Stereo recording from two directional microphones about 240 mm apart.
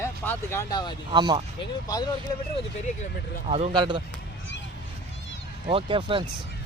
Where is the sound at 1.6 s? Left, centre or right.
Centre.